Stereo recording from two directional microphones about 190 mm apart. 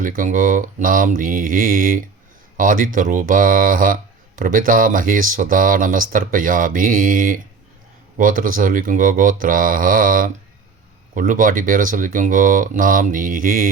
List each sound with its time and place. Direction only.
0.0 s speech: 45° right (ahead or behind)